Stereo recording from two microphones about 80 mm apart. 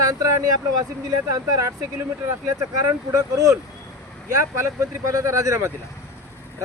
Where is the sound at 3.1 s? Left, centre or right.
Right.